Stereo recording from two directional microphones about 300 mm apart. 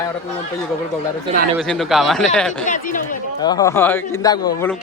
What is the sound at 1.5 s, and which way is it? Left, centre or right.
Speech, centre.